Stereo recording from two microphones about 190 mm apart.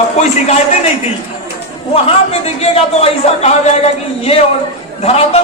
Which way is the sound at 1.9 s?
30° left (ahead or behind).